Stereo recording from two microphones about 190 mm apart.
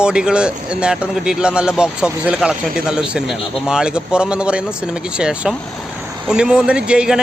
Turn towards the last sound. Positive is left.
turn(degrees=-5)  # may be behind; listen again after turning